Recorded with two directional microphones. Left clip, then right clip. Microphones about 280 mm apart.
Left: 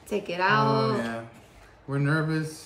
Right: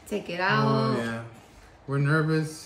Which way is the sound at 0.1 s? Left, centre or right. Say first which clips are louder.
Left 2 dB; centre.